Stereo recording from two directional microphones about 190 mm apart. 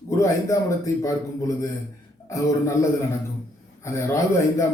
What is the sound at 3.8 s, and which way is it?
Speech, 15° left (ahead or behind).